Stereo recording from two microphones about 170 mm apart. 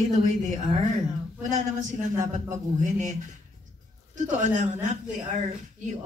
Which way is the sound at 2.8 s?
45° right (ahead or behind).